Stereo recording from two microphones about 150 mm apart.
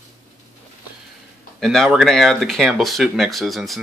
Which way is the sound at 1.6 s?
Centre (ahead or behind).